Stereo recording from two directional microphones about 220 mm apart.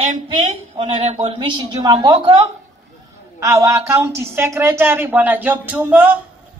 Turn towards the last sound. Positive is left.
turn(degrees=-5)  # may be behind; listen again after turning